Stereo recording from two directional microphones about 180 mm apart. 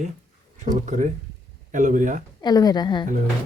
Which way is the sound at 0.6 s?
40° right (ahead or behind).